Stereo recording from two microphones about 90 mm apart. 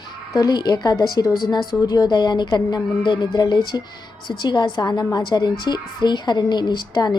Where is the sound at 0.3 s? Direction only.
45° left (ahead or behind).